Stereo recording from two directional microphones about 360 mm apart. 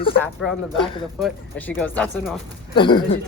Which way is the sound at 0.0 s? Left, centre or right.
Centre.